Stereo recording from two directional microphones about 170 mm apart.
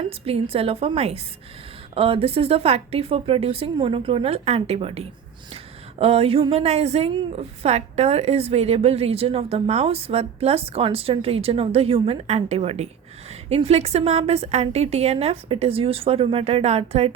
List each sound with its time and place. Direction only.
0.3 s a woman's voice: 35° right (ahead or behind)